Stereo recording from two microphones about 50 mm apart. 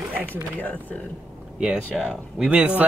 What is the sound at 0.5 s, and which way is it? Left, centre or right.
Speech, left.